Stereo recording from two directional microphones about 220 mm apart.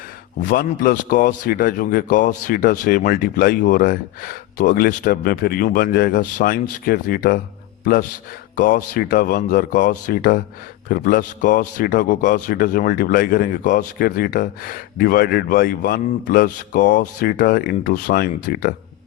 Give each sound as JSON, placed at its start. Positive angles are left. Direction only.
{"t": 0.4, "sound": "speech", "side_deg": 40}
{"t": 8.5, "sound": "speech", "side_deg": 40}